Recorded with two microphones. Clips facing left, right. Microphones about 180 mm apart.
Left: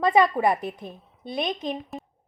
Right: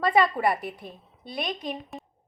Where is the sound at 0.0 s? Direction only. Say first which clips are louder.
Left 3 dB; 20° left (ahead or behind).